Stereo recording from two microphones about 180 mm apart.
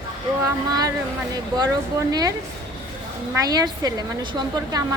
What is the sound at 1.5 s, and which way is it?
Speech, 20° right (ahead or behind).